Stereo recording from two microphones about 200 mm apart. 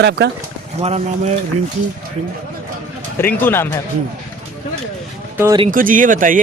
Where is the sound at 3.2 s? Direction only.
10° left (ahead or behind).